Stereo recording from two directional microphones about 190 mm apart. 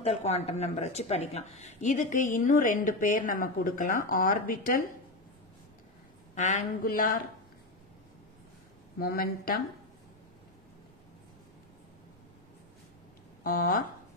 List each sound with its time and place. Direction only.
0.0 s speech: 35° left (ahead or behind)
6.3 s speech: 40° left (ahead or behind)
8.9 s speech: 50° left (ahead or behind)
13.4 s speech: 50° left (ahead or behind)